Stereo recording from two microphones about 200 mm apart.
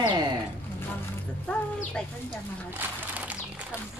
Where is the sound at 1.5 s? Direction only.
5° left (ahead or behind).